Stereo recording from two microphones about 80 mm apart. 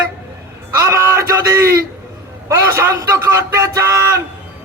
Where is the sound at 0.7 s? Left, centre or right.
Right.